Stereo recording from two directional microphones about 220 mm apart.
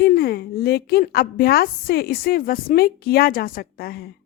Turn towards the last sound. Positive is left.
turn(degrees=45)  # may be behind; listen again after turning